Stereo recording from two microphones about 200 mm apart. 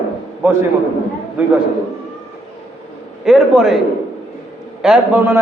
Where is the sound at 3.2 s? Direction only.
Centre (ahead or behind).